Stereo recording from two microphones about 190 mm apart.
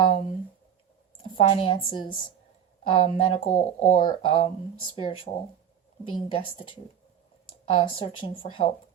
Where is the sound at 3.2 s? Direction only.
30° left (ahead or behind).